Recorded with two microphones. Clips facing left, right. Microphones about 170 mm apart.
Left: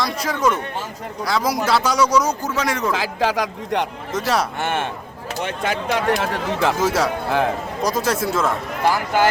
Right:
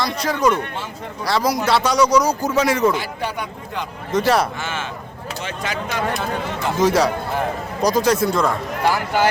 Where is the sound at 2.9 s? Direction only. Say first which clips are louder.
Left 4 dB; 90° left.